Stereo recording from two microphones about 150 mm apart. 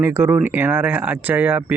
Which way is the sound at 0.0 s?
15° right (ahead or behind).